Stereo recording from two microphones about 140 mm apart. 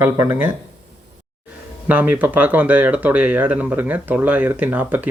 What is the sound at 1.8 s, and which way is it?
Speech, 10° right (ahead or behind).